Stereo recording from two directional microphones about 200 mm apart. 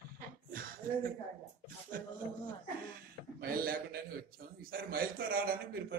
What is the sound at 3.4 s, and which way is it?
A man's voice, 50° right (ahead or behind).